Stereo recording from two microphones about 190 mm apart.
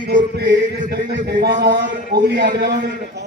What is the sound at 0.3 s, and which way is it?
Speech, 60° right (ahead or behind).